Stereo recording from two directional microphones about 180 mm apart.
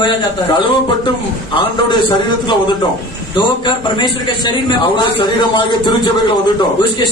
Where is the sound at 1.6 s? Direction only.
25° left (ahead or behind).